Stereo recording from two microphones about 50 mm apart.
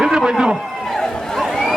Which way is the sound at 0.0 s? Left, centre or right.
Centre.